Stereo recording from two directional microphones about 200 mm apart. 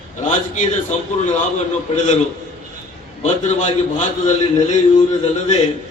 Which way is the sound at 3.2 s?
35° left (ahead or behind).